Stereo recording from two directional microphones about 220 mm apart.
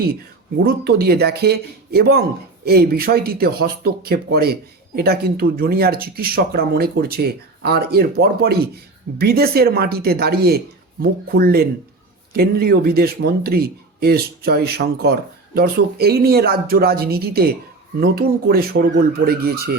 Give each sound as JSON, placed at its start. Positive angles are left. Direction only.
{"t": 0.6, "sound": "speech", "side_deg": -45}